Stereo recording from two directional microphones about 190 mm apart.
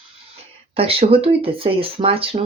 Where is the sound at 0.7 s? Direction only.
30° right (ahead or behind).